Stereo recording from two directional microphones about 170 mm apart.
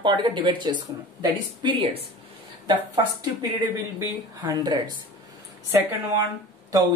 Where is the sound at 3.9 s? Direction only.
20° right (ahead or behind).